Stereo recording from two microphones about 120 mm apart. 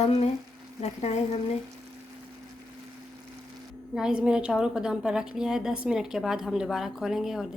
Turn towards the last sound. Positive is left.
turn(degrees=0)  # may be behind; listen again after turning